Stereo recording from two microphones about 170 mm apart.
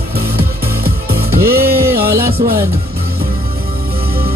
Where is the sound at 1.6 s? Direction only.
65° right (ahead or behind).